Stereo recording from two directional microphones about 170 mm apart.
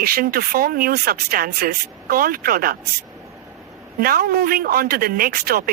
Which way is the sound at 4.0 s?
60° right (ahead or behind).